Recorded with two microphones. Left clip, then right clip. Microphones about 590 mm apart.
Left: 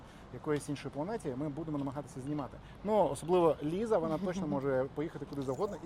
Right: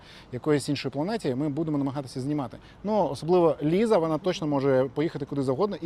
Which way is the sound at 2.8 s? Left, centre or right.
Right.